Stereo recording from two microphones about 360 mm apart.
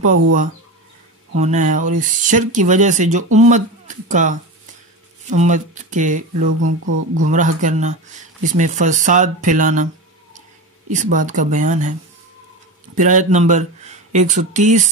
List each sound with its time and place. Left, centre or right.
0.0 s speech: right
10.9 s speech: right
12.9 s speech: right